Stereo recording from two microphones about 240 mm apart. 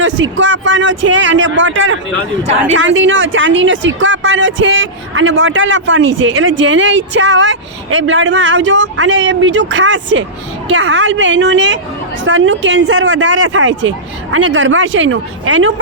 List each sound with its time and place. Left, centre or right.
0.0 s speech: right